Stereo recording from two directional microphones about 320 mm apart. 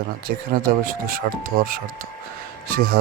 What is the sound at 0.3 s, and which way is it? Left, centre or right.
Speech, right.